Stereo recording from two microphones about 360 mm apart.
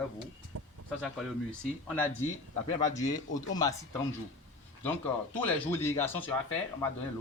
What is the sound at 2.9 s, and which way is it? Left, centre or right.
Speech, centre.